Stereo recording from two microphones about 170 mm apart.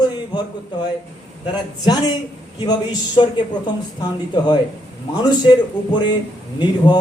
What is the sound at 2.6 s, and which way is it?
Speech, 25° left (ahead or behind).